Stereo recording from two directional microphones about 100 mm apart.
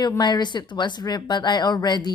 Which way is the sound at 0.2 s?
45° left (ahead or behind).